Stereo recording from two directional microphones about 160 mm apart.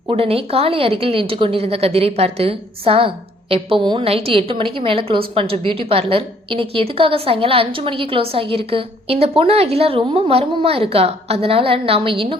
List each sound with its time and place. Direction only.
0.1 s a woman's voice: 35° right (ahead or behind)